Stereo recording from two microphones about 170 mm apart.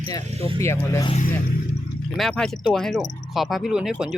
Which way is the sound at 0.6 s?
15° left (ahead or behind).